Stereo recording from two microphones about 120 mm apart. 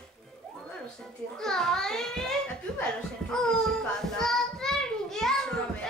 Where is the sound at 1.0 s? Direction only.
5° left (ahead or behind).